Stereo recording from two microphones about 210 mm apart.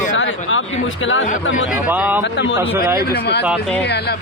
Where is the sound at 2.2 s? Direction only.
60° left (ahead or behind).